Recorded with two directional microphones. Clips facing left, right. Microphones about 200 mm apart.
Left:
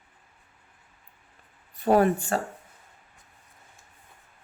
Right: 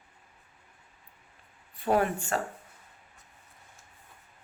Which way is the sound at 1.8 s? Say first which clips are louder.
Left 6 dB; 40° left (ahead or behind).